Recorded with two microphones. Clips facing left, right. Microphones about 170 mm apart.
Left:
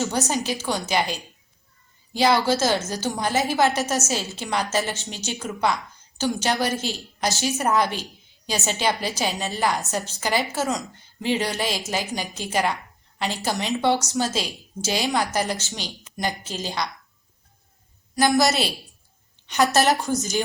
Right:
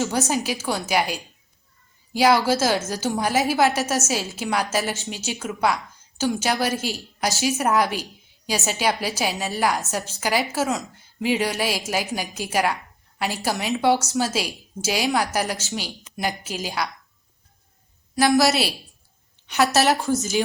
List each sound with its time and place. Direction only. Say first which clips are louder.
0.0 s a woman's voice: right 1 dB; centre (ahead or behind)
18.2 s a woman's voice: right 1 dB; centre (ahead or behind)